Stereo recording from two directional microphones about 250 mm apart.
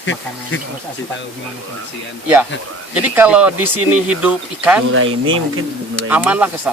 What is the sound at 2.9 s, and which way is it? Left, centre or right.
Speech, centre.